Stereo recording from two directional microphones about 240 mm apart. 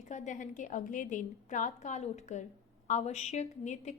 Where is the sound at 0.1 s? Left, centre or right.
Left.